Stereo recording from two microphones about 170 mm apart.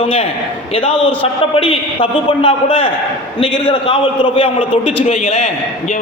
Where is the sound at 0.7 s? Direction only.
35° left (ahead or behind).